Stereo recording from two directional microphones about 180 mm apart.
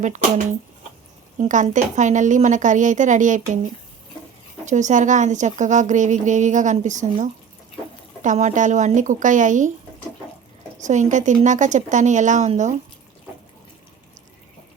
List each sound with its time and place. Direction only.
0.0 s a woman's voice: 45° right (ahead or behind)
4.6 s a woman's voice: 40° right (ahead or behind)
10.8 s a woman's voice: 40° right (ahead or behind)